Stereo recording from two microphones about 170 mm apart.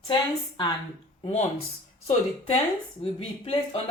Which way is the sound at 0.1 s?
30° left (ahead or behind).